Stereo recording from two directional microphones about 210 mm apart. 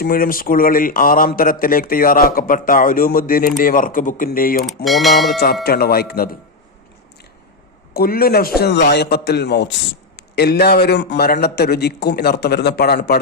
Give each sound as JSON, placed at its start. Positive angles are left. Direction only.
{"t": 0.0, "sound": "speech", "side_deg": 45}
{"t": 4.6, "sound": "speech", "side_deg": 0}
{"t": 5.6, "sound": "speech", "side_deg": 45}
{"t": 7.9, "sound": "speech", "side_deg": 45}